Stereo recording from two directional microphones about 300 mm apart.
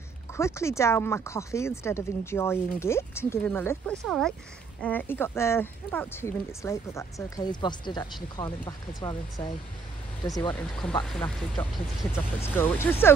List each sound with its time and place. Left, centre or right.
0.4 s speech: centre